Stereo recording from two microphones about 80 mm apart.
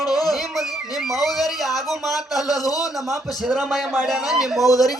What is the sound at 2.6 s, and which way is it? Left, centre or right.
Speech, left.